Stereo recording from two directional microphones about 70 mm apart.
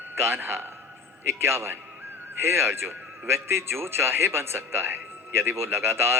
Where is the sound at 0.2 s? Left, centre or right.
Right.